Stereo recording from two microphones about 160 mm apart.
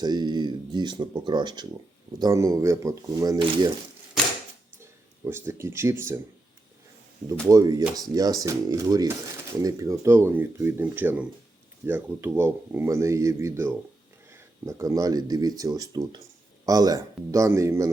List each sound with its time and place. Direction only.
0.0 s speech: 25° right (ahead or behind)
4.8 s speech: 15° right (ahead or behind)
7.4 s speech: 20° right (ahead or behind)